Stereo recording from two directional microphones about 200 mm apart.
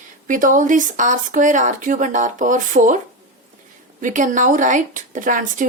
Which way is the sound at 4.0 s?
40° right (ahead or behind).